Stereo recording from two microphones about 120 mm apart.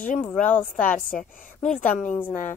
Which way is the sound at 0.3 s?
10° left (ahead or behind).